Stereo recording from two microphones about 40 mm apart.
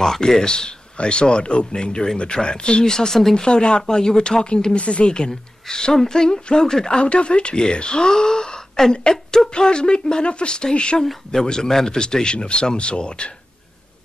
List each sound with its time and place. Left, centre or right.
0.0 s speech: centre
3.4 s a woman's voice: left
11.0 s a woman's voice: centre